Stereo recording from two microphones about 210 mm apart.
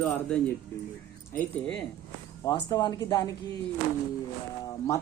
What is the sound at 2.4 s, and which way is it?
Speech, 20° left (ahead or behind).